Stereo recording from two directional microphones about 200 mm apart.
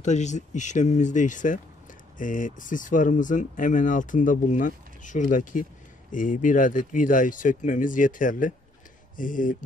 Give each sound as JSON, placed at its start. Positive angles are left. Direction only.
{"t": 0.0, "sound": "speech", "side_deg": 35}